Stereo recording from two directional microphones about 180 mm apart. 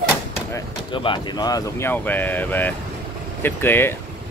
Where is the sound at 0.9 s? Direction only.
25° left (ahead or behind); by 3.9 s 10° left (ahead or behind).